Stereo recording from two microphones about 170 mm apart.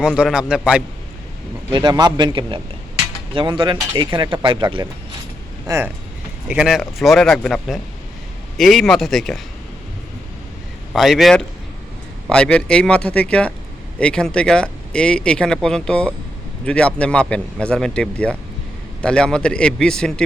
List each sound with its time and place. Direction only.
0.0 s speech: 5° right (ahead or behind)
1.7 s speech: 25° right (ahead or behind)
5.6 s speech: 15° right (ahead or behind)
6.5 s speech: 5° right (ahead or behind)
10.9 s speech: centre (ahead or behind)